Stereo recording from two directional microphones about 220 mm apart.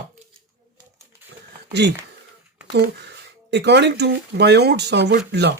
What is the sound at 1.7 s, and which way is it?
Speech, 50° right (ahead or behind).